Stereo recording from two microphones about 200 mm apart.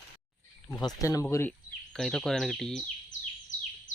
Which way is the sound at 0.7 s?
15° left (ahead or behind).